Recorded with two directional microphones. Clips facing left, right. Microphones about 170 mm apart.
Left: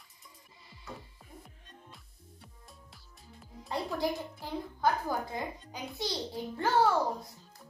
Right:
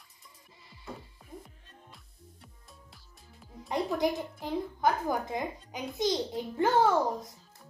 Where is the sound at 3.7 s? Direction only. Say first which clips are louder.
Right 4 dB; 20° right (ahead or behind).